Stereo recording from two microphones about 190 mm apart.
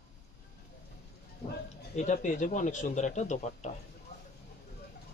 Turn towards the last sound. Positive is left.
turn(degrees=40)  # may be behind; listen again after turning